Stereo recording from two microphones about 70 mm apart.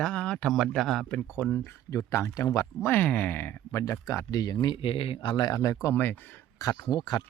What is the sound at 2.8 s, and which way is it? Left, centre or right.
Speech, left.